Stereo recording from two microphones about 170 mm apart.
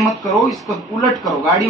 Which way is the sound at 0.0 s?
Centre (ahead or behind).